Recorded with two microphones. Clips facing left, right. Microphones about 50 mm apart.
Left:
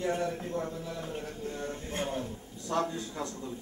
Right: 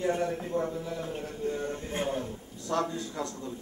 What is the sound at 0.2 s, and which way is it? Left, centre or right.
A man's voice, centre.